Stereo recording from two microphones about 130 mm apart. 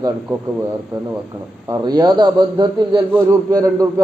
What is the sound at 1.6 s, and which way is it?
A man's voice, 30° right (ahead or behind).